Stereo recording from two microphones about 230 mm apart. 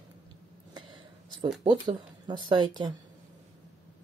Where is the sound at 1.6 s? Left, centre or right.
Centre.